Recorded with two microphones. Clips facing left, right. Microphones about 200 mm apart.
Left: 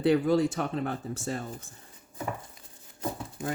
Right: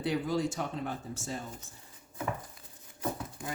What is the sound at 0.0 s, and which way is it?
Speech, 60° left (ahead or behind).